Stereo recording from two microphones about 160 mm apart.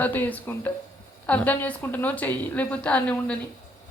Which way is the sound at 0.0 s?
10° left (ahead or behind).